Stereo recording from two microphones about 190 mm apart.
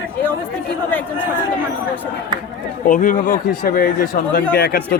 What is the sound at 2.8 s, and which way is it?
Speech, 45° left (ahead or behind).